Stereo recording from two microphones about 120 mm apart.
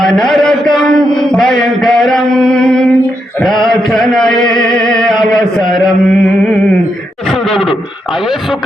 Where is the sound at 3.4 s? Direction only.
Centre (ahead or behind).